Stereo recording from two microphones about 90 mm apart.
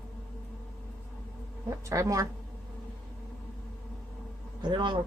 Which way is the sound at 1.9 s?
40° right (ahead or behind).